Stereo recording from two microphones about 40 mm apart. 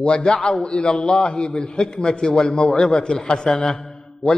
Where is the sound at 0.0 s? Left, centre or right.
Left.